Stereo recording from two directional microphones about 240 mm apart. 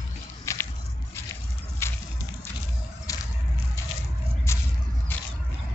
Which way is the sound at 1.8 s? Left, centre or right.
Centre.